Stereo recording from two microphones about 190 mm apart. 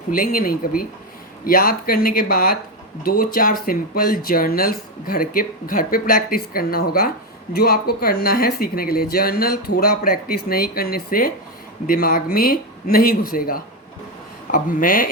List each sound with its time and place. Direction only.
0.1 s speech: 45° left (ahead or behind)